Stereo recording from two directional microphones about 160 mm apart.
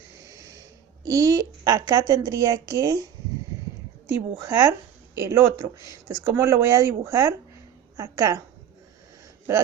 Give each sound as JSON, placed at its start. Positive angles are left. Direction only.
{"t": 0.3, "sound": "snort", "side_deg": -20}
{"t": 1.0, "sound": "speech", "side_deg": -20}